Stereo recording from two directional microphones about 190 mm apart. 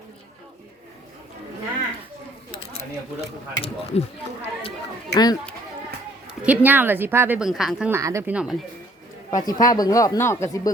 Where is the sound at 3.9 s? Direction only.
35° left (ahead or behind).